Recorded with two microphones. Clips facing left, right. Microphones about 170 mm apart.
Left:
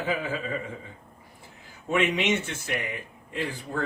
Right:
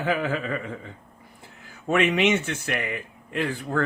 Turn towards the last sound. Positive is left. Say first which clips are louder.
# right 5 dB
turn(degrees=-70)  # may be behind; listen again after turning